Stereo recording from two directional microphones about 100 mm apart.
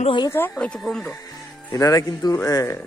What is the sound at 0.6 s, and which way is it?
Speech, 5° left (ahead or behind).